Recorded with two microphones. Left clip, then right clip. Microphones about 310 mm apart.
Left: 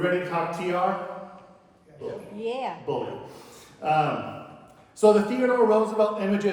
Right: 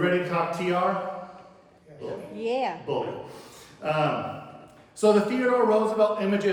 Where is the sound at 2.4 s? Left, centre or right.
Right.